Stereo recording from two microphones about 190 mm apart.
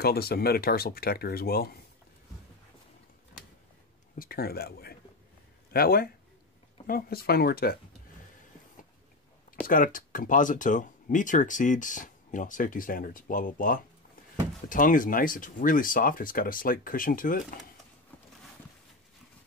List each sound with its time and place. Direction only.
0.0 s speech: 55° left (ahead or behind)
4.2 s speech: 50° left (ahead or behind)
9.7 s speech: 45° left (ahead or behind)